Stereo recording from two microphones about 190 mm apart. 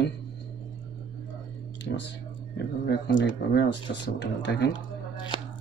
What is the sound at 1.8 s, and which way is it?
Speech, 65° left (ahead or behind).